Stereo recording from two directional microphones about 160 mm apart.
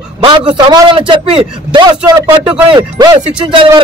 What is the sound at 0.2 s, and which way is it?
Speech, 30° right (ahead or behind).